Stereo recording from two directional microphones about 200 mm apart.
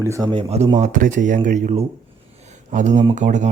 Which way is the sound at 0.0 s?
15° right (ahead or behind).